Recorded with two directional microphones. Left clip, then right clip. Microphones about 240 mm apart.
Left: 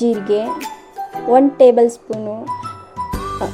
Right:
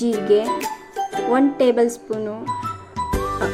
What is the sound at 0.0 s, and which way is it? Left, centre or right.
Speech, centre.